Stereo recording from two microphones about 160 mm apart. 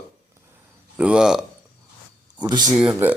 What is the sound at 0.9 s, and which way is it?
Speech, 5° right (ahead or behind).